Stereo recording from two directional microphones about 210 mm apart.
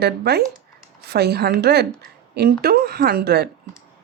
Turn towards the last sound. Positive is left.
turn(degrees=-50)  # may be behind; listen again after turning